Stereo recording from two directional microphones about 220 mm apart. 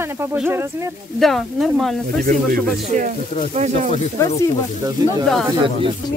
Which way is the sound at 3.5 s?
30° right (ahead or behind).